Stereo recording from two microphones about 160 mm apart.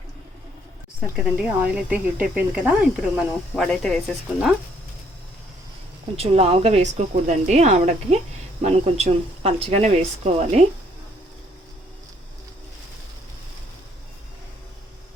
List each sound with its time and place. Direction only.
1.5 s speech: 10° right (ahead or behind)
2.9 s speech: centre (ahead or behind)
6.1 s speech: 40° right (ahead or behind)